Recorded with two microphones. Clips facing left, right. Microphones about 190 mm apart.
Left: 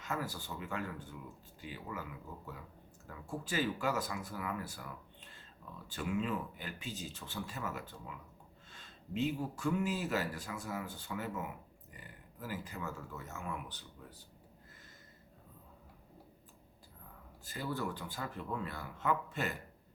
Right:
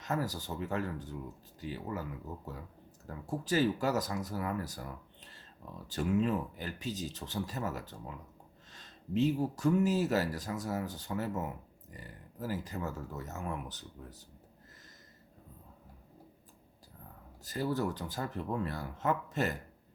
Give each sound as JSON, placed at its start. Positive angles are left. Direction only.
{"t": 0.0, "sound": "speech", "side_deg": -40}
{"t": 17.4, "sound": "speech", "side_deg": -40}